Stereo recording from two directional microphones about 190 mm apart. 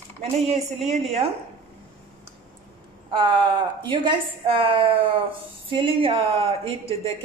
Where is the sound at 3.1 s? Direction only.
25° right (ahead or behind).